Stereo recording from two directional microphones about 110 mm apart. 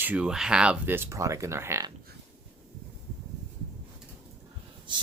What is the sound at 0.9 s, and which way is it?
Speech, 25° right (ahead or behind).